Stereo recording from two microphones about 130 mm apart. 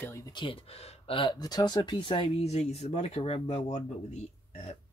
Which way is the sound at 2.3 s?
55° left (ahead or behind).